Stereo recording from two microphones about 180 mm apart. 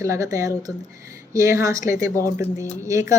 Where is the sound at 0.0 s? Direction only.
15° right (ahead or behind).